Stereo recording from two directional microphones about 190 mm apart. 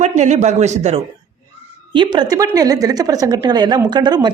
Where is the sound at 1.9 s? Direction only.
25° right (ahead or behind).